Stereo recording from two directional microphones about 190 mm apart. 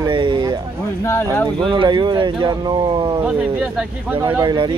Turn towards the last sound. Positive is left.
turn(degrees=-25)  # may be behind; listen again after turning